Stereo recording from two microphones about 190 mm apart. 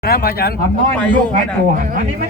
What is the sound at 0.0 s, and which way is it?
Speech, 50° left (ahead or behind).